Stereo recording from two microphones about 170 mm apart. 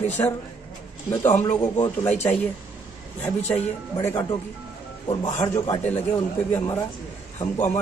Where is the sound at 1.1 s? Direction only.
15° left (ahead or behind).